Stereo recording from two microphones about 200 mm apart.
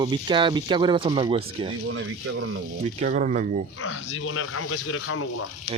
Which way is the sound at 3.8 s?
85° left.